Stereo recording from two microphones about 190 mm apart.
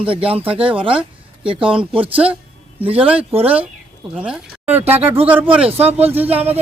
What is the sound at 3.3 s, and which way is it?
Speech, 30° right (ahead or behind).